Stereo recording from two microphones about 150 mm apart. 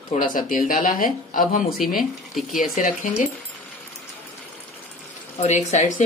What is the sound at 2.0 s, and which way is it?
Speech, centre (ahead or behind).